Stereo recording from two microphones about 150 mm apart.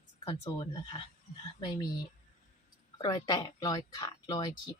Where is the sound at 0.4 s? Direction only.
30° left (ahead or behind).